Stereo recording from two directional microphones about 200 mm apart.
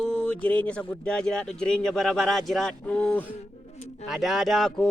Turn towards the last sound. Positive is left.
turn(degrees=0)  # may be behind; listen again after turning